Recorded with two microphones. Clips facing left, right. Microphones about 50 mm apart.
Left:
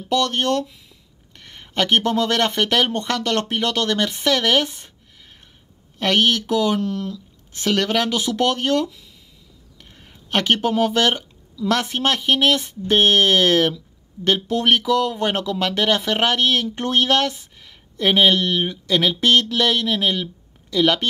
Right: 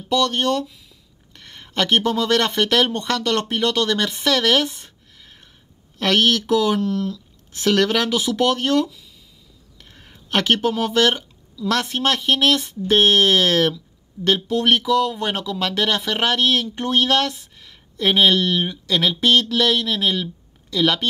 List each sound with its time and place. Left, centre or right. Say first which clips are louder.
0.1 s speech: even; left
1.3 s speech: left 1 dB; left
3.7 s speech: right 1 dB; left
4.0 s speech: even; left
5.9 s speech: even; left
8.8 s speech: left 3 dB; left
10.3 s speech: even; left